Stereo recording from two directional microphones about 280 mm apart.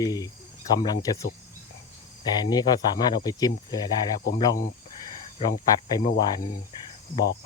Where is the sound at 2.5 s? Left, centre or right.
Centre.